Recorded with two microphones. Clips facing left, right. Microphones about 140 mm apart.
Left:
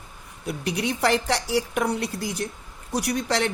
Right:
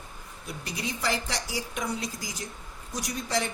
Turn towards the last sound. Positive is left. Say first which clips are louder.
# left 6 dB
turn(degrees=70)  # may be behind; listen again after turning